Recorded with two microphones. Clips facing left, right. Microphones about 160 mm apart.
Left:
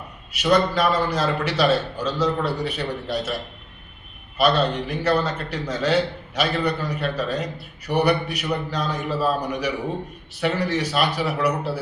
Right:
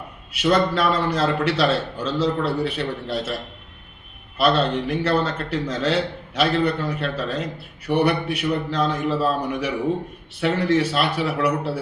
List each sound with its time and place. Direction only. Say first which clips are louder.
0.3 s a man's voice: even; 30° right (ahead or behind)
4.4 s a man's voice: even; 30° right (ahead or behind)